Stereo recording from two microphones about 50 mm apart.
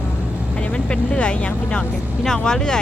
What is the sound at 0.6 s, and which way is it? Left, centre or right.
Speech, left.